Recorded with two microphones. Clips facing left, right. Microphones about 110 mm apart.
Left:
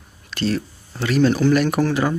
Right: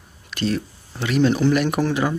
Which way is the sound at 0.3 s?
15° right (ahead or behind).